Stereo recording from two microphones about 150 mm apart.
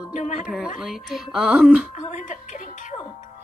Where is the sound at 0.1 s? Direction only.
50° left (ahead or behind).